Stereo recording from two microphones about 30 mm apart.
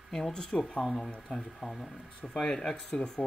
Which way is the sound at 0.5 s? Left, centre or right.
Left.